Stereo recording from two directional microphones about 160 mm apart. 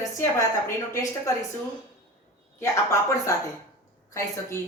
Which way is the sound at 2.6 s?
20° left (ahead or behind).